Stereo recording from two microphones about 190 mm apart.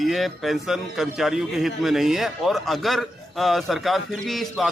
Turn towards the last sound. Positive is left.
turn(degrees=0)  # may be behind; listen again after turning